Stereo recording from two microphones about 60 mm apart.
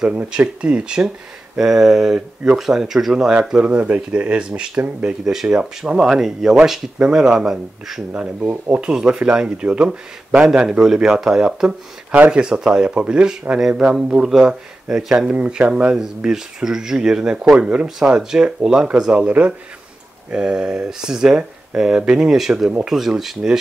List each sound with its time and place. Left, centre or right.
0.6 s speech: centre
3.7 s speech: right; by 8.0 s centre
8.1 s speech: centre
12.1 s speech: right
15.3 s speech: right; by 23.6 s centre